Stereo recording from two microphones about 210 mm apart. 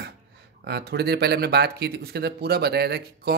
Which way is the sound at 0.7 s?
50° right (ahead or behind).